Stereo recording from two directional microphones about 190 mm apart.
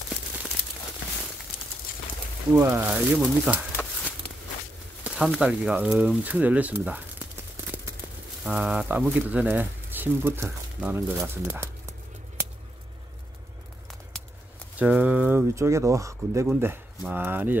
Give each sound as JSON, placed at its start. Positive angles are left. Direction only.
{"t": 2.5, "sound": "speech", "side_deg": -10}
{"t": 5.0, "sound": "speech", "side_deg": -5}
{"t": 14.8, "sound": "speech", "side_deg": -10}